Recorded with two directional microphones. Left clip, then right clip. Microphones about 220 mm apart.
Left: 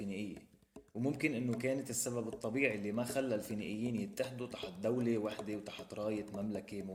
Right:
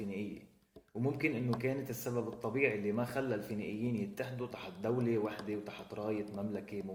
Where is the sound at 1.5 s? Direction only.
35° left (ahead or behind).